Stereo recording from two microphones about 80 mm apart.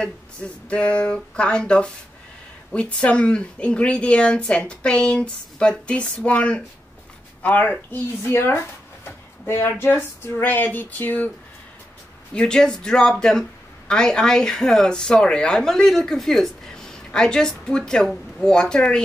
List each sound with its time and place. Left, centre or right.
0.0 s speech: centre
7.9 s speech: left
12.4 s speech: centre